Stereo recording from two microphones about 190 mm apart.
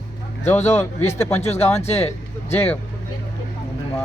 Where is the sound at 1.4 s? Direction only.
35° left (ahead or behind).